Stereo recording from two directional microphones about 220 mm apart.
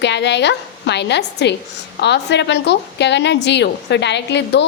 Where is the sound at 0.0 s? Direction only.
50° left (ahead or behind).